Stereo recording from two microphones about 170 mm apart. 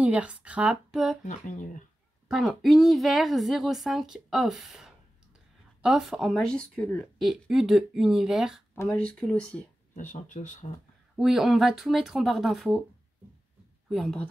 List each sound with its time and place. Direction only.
0.0 s speech: 5° right (ahead or behind)
1.2 s speech: 45° left (ahead or behind)
2.2 s speech: centre (ahead or behind)
9.9 s speech: 50° left (ahead or behind)
11.1 s speech: centre (ahead or behind)
13.8 s a woman's voice: centre (ahead or behind)